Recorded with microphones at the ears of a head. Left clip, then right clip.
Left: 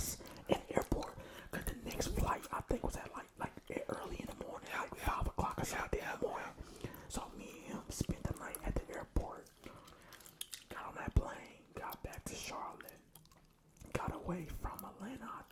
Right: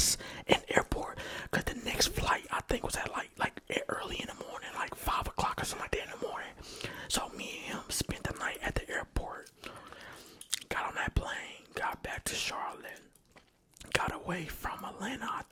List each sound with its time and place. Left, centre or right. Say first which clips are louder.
0.0 s whispering: right 14 dB; right
13.9 s whispering: right 9 dB; right